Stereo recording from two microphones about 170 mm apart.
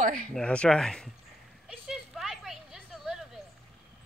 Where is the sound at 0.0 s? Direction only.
50° right (ahead or behind).